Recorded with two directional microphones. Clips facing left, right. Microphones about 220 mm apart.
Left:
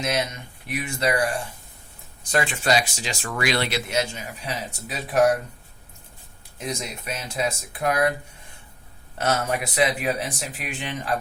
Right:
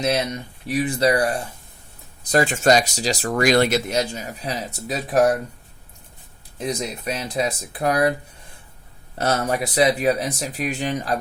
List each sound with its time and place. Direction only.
0.0 s speech: 35° right (ahead or behind)
6.6 s speech: 35° right (ahead or behind)
9.1 s speech: 35° right (ahead or behind)